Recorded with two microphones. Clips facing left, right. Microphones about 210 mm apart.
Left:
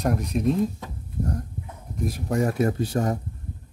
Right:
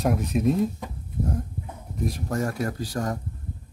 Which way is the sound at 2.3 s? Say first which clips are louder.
Left 7 dB; 20° left (ahead or behind).